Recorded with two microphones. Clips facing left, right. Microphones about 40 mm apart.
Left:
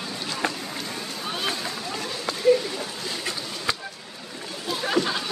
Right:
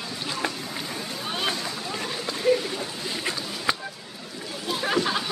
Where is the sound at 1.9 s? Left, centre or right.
Centre.